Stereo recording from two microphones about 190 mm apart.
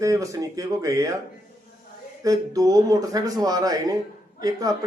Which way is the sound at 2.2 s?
20° right (ahead or behind).